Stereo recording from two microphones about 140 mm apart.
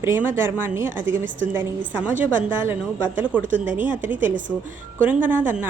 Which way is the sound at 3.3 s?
10° right (ahead or behind).